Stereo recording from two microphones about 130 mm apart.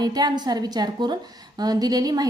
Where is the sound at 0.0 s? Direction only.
30° right (ahead or behind).